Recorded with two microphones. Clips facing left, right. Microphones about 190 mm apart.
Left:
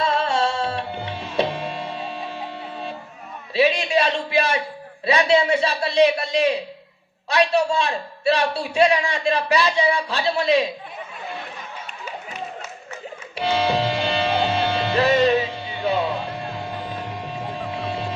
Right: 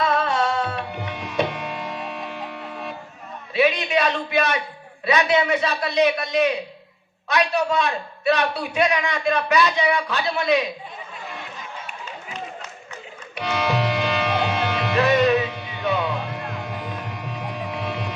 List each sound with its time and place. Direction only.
0.0 s music: 30° left (ahead or behind)
3.5 s a man's voice: 30° left (ahead or behind)
13.3 s music: 30° left (ahead or behind)